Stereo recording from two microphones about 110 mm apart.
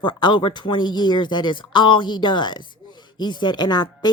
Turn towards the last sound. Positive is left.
turn(degrees=40)  # may be behind; listen again after turning